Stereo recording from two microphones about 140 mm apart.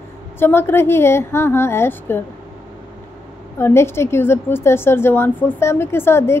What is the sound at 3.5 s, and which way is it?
A woman's voice, 15° left (ahead or behind).